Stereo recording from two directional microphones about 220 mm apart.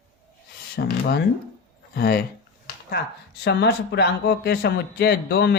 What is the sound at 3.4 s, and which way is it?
A man's voice, 50° left (ahead or behind).